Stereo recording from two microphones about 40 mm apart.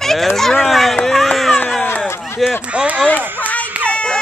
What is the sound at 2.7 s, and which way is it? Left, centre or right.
Speech, right.